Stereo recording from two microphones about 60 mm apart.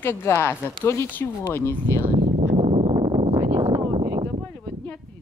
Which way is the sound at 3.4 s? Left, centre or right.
Right.